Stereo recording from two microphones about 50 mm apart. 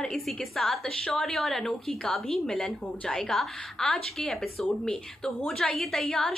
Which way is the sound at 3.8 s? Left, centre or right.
Centre.